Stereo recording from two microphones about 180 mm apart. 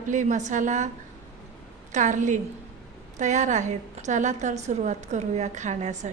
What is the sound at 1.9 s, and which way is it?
A woman's voice, 45° right (ahead or behind).